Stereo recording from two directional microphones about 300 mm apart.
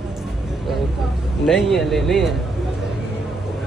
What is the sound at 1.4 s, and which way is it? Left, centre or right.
Speech, centre.